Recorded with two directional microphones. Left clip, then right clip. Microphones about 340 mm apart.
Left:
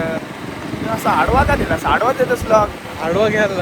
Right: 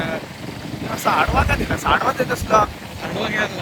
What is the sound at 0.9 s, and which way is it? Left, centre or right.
Speech, centre.